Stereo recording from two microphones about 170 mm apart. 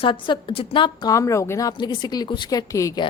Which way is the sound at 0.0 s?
30° left (ahead or behind).